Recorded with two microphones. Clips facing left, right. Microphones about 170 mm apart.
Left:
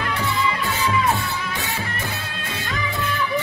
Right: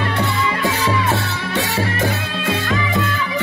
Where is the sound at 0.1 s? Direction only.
80° right.